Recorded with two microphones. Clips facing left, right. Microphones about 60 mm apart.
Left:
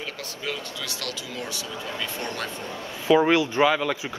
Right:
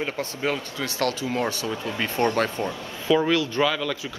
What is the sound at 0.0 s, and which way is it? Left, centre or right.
A man's voice, right.